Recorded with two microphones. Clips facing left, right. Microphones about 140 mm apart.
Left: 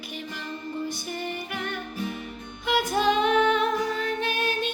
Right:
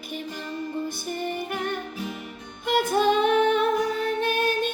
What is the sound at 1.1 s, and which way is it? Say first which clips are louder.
Music: right 3 dB; 45° right (ahead or behind).